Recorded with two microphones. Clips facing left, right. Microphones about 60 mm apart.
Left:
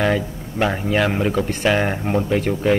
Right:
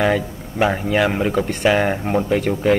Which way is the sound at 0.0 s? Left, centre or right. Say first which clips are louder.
Right 1 dB; centre.